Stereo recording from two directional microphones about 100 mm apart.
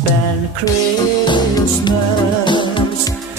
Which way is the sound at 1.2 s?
50° left (ahead or behind).